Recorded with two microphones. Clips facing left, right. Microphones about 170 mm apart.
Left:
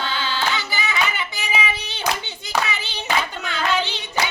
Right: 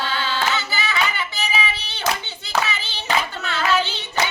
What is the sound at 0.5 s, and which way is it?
Hands, 15° left (ahead or behind).